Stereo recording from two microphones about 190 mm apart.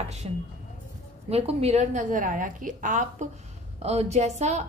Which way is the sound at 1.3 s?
35° right (ahead or behind).